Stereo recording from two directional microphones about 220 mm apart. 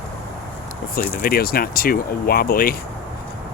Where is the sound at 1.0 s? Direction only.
40° left (ahead or behind).